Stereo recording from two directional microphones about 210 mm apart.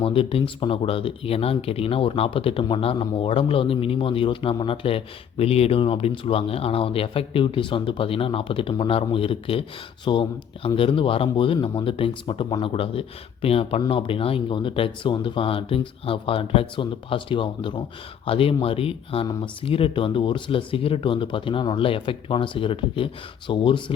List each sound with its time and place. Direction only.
0.0 s speech: 25° left (ahead or behind)